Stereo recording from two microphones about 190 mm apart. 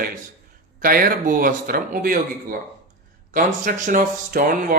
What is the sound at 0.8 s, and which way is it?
Speech, 50° right (ahead or behind).